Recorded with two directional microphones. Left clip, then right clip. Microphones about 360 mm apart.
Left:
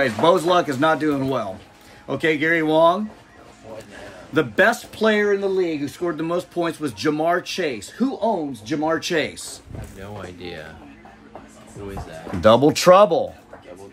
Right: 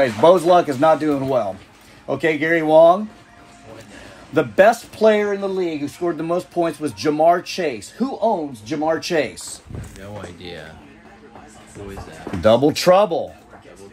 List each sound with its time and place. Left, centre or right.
0.0 s speech: centre
4.3 s speech: centre
12.4 s speech: centre